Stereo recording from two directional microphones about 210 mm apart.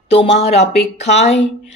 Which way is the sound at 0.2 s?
30° left (ahead or behind).